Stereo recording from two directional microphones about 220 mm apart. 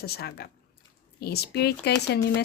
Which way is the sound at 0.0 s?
45° left (ahead or behind).